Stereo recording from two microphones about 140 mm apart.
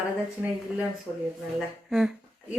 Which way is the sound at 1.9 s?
5° right (ahead or behind).